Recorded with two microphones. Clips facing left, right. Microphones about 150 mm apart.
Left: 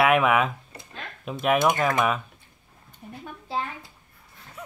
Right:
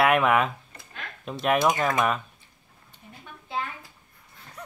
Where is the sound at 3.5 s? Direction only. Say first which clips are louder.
Left 2 dB; 35° left (ahead or behind).